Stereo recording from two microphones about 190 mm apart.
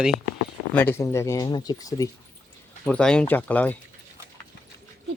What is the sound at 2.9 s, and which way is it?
Speech, 5° left (ahead or behind).